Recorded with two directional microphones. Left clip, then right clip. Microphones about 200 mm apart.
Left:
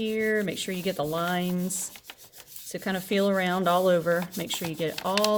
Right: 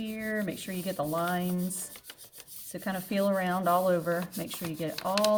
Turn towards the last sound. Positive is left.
turn(degrees=45)  # may be behind; listen again after turning